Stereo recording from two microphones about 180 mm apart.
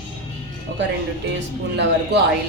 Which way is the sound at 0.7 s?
70° right (ahead or behind).